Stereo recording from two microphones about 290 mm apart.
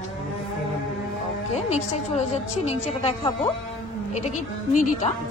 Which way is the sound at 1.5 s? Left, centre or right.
Left.